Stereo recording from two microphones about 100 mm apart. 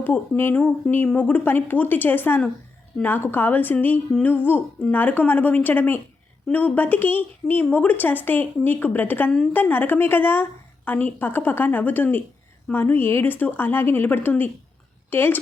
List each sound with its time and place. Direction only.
0.0 s a woman's voice: 20° left (ahead or behind)